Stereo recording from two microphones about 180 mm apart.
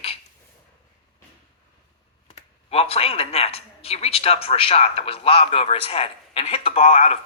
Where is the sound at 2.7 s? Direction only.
35° left (ahead or behind).